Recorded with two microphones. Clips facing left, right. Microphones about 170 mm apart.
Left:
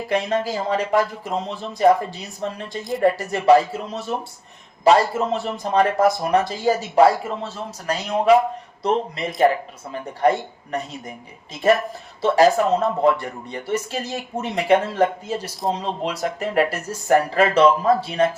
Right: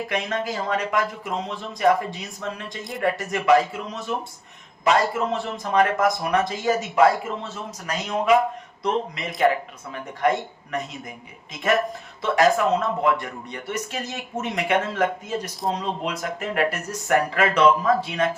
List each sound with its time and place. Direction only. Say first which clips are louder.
0.1 s a man's voice: left 8 dB; 30° left (ahead or behind)
12.2 s a man's voice: left 3 dB; 30° left (ahead or behind)